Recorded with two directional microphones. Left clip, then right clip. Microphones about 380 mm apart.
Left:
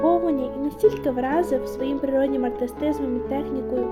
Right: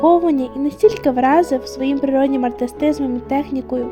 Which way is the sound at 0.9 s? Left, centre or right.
Right.